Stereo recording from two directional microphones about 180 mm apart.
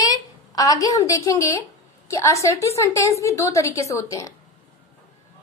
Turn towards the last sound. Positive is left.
turn(degrees=15)  # may be behind; listen again after turning